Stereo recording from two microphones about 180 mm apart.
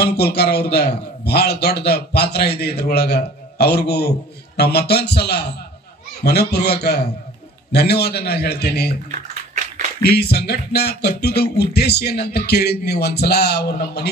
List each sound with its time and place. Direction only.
0.0 s a man's voice: 65° left (ahead or behind)
10.0 s a man's voice: 65° left (ahead or behind)